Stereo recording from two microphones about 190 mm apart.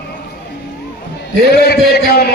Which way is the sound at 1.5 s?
60° left (ahead or behind).